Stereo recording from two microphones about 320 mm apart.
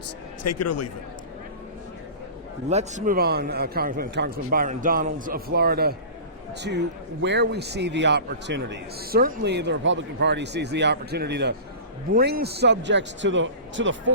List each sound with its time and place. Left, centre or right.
0.4 s a man's voice: left
2.6 s a man's voice: right